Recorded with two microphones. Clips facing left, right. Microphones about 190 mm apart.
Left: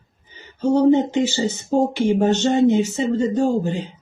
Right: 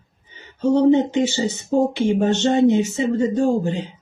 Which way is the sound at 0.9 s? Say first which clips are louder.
Even; 20° right (ahead or behind).